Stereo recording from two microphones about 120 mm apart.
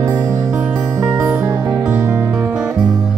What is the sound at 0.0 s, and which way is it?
Music, 25° right (ahead or behind).